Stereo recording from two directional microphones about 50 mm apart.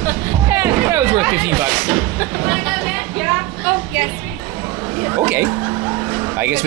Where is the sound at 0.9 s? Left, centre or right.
Right.